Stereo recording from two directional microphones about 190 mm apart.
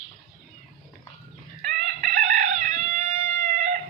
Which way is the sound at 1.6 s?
40° right (ahead or behind).